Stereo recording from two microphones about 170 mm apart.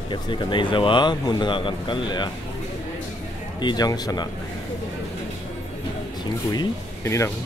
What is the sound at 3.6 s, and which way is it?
Speech, 25° left (ahead or behind).